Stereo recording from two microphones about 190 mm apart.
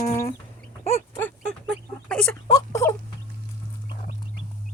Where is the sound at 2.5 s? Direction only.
20° left (ahead or behind).